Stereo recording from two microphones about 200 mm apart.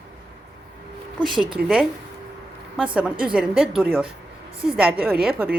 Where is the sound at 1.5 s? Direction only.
5° right (ahead or behind).